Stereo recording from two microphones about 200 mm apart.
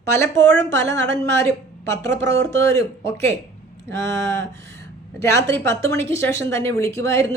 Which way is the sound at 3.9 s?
65° right (ahead or behind).